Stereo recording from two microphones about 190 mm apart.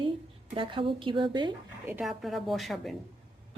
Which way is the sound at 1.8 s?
5° right (ahead or behind).